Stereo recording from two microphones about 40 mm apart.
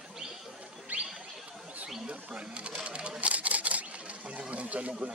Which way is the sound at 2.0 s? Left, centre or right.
Right.